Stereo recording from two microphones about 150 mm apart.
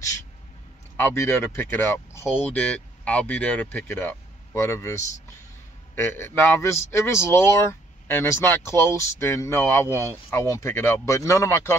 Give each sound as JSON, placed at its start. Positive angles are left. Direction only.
{"t": 0.9, "sound": "a man's voice", "side_deg": 15}